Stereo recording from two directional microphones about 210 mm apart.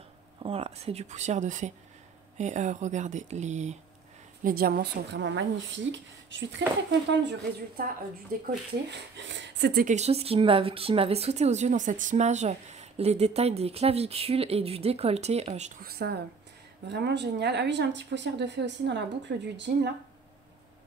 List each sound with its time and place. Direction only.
0.4 s a woman's voice: 30° right (ahead or behind); by 9.8 s 55° right (ahead or behind)
9.8 s speech: 30° right (ahead or behind)
15.9 s a woman's voice: 50° right (ahead or behind)